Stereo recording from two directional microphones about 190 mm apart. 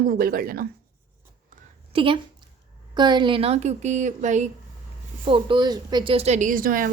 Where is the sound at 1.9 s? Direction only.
25° right (ahead or behind).